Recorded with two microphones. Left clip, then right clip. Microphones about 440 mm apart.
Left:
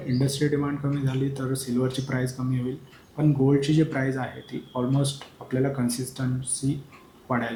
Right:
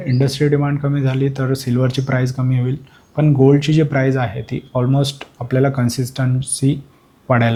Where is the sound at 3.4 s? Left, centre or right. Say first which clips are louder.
Right 9 dB; right.